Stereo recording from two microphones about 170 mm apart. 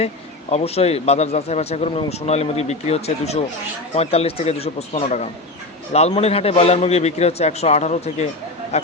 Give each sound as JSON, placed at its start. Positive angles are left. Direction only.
{"t": 0.5, "sound": "a man's voice", "side_deg": 40}